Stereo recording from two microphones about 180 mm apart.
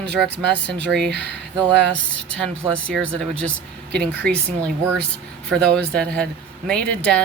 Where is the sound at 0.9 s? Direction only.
70° right (ahead or behind).